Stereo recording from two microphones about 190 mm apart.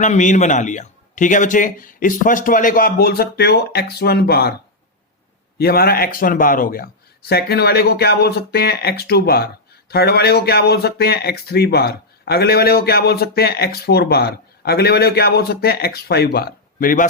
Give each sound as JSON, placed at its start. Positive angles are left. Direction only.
{"t": 0.0, "sound": "speech", "side_deg": 40}
{"t": 5.5, "sound": "speech", "side_deg": 55}